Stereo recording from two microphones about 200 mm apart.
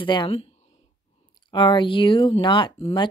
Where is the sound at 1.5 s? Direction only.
25° left (ahead or behind).